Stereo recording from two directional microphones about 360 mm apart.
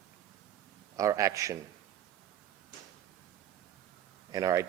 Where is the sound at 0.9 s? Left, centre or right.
Centre.